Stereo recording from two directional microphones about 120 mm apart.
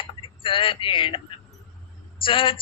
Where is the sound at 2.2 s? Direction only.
45° left (ahead or behind).